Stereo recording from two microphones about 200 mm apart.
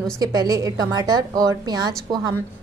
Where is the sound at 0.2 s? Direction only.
20° right (ahead or behind).